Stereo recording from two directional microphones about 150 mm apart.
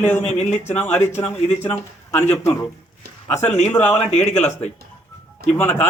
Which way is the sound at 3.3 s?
50° left (ahead or behind).